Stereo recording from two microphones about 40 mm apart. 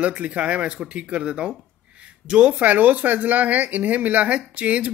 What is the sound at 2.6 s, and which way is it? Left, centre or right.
A man's voice, right.